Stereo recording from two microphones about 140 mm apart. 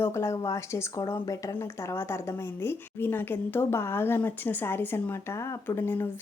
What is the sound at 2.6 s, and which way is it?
Speech, 15° left (ahead or behind).